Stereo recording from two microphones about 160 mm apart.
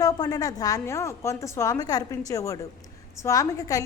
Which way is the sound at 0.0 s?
25° left (ahead or behind).